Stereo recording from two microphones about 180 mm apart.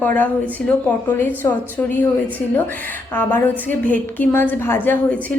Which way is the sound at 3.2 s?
10° left (ahead or behind).